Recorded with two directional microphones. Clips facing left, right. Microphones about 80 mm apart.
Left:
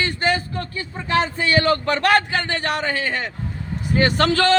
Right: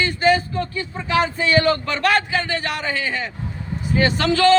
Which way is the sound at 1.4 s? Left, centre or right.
Left.